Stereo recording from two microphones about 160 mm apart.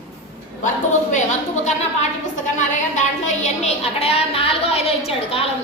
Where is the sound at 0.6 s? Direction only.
50° left (ahead or behind).